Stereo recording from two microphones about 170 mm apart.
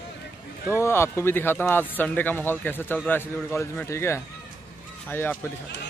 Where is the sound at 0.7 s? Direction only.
15° left (ahead or behind).